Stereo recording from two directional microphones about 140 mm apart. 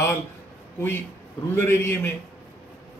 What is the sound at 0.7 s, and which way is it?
A man's voice, 15° left (ahead or behind).